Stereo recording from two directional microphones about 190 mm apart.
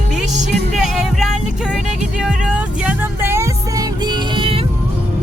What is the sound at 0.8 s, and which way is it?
Music, centre (ahead or behind).